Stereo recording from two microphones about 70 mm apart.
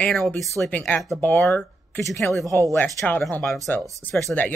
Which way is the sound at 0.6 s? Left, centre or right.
Left.